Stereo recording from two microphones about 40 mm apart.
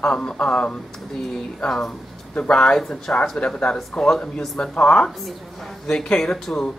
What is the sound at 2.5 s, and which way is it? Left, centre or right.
Speech, left.